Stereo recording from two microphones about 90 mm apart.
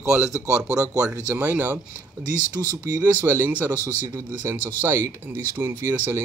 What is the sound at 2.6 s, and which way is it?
Speech, 40° right (ahead or behind).